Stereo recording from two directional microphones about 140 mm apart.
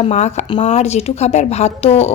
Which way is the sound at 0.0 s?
55° left (ahead or behind).